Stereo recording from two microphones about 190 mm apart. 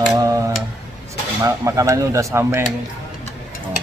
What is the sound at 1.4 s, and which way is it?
Speech, 15° right (ahead or behind).